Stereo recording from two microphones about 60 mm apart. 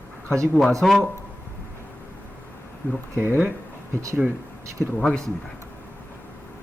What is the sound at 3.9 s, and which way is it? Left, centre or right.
Speech, right.